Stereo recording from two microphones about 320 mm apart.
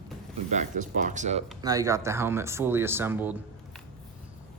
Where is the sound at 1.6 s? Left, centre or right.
Centre.